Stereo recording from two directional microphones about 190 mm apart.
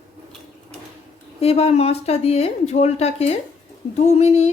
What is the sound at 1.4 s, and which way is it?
A woman's voice, 30° left (ahead or behind).